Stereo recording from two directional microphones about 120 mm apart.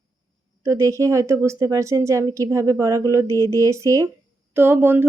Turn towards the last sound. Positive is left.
turn(degrees=-20)  # may be behind; listen again after turning